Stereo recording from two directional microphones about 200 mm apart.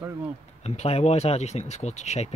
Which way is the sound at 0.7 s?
30° left (ahead or behind).